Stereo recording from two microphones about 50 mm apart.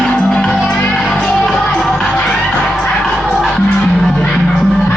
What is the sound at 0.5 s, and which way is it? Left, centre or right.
Music, centre.